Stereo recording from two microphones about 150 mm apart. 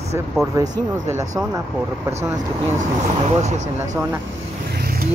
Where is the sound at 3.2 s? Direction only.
50° right (ahead or behind).